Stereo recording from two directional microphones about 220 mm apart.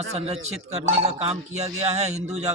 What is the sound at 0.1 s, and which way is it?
A man's voice, 30° right (ahead or behind).